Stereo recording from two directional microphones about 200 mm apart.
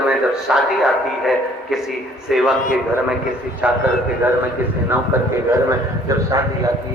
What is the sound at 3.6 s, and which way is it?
Speech, 5° right (ahead or behind).